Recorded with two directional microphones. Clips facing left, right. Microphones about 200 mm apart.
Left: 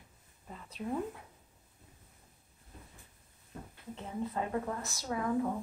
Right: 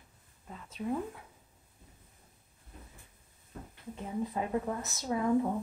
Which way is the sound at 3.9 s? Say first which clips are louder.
Right 2 dB; 15° right (ahead or behind).